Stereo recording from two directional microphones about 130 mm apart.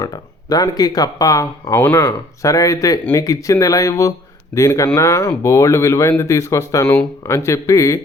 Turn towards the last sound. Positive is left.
turn(degrees=25)  # may be behind; listen again after turning